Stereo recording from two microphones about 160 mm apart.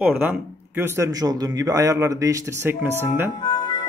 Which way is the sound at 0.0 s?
10° right (ahead or behind).